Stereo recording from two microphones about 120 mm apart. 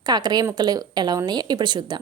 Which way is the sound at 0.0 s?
35° right (ahead or behind).